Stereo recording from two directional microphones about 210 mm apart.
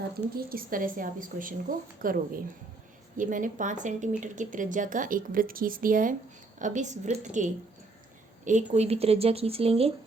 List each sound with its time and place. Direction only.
0.3 s speech: 40° right (ahead or behind)